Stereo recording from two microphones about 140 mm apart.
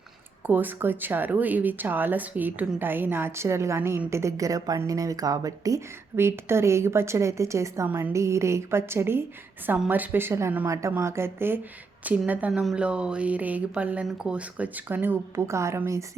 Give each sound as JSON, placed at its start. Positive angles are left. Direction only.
{"t": 0.4, "sound": "speech", "side_deg": -15}